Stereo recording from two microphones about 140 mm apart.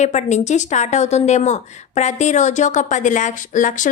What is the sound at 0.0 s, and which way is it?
A woman's voice, 55° left (ahead or behind).